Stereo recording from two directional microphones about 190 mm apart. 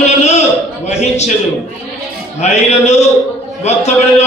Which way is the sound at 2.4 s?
35° left (ahead or behind).